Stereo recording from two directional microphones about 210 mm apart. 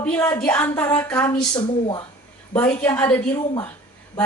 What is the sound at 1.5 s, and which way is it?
Speech, 20° left (ahead or behind).